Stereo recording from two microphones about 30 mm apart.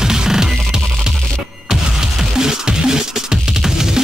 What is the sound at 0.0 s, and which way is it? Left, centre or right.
Music, centre.